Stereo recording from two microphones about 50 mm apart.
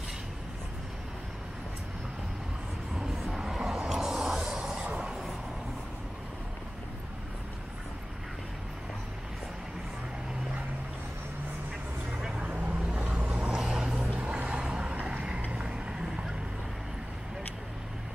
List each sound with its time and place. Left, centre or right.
3.0 s vehicle: centre
12.2 s vehicle: centre
12.4 s vehicle: right
13.6 s vehicle: centre
14.1 s a sound: right
15.0 s vehicle: right